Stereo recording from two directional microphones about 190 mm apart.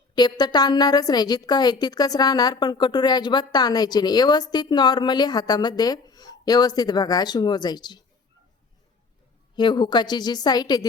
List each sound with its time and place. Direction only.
0.1 s a woman's voice: 20° left (ahead or behind)
9.6 s a woman's voice: 25° left (ahead or behind)